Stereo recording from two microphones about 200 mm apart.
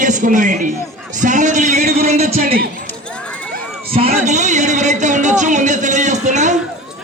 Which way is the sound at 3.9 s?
30° right (ahead or behind).